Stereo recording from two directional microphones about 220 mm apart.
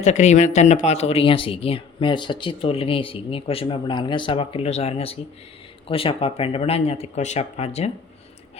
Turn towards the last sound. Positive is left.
turn(degrees=30)  # may be behind; listen again after turning